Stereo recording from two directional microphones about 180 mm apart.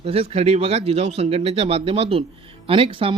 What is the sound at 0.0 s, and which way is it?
Speech, 35° right (ahead or behind).